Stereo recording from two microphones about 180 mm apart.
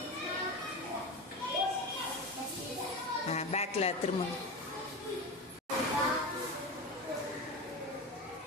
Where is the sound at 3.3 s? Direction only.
35° left (ahead or behind).